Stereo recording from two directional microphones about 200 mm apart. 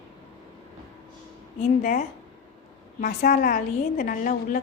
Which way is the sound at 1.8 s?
45° left (ahead or behind).